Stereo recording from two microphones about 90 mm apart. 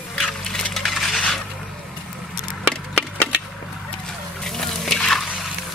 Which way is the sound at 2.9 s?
10° left (ahead or behind).